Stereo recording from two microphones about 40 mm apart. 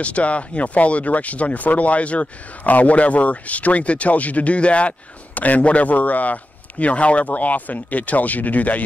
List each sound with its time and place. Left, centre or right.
0.0 s speech: left